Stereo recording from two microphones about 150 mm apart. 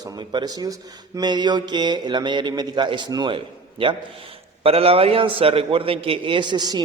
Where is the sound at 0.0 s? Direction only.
30° right (ahead or behind).